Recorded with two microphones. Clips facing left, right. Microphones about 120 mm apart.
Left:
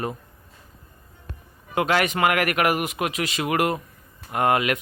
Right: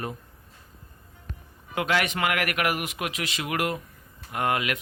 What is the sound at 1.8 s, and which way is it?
Speech, 45° left (ahead or behind).